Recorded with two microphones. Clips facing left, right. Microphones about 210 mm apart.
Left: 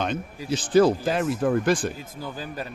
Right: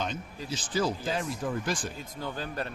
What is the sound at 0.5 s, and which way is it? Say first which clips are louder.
Speech: left 11 dB; 60° left (ahead or behind).